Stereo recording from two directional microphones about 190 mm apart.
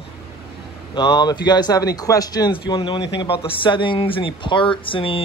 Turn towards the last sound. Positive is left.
turn(degrees=30)  # may be behind; listen again after turning